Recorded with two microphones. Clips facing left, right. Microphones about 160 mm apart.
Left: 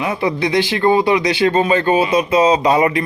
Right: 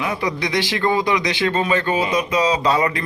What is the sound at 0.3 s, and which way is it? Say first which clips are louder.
Speech: left 5 dB; 30° left (ahead or behind).